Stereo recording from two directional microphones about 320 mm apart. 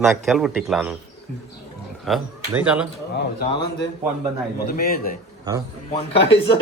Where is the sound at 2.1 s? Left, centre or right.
Centre.